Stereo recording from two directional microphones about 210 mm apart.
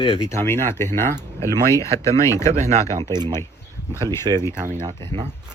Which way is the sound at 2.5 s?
35° right (ahead or behind).